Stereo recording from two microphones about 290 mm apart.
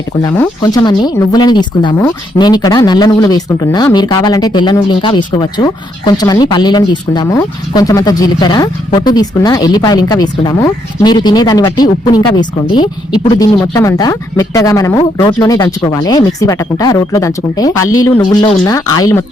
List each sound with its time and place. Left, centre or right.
0.2 s speech: centre
17.8 s speech: left
18.2 s speech: centre